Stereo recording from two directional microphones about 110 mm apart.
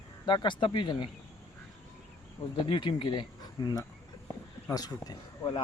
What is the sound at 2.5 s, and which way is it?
Speech, 45° left (ahead or behind).